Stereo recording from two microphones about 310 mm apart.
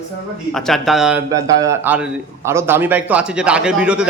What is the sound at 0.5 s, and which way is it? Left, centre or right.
Speech, centre.